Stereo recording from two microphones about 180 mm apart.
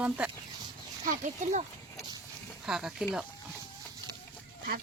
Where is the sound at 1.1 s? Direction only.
40° right (ahead or behind).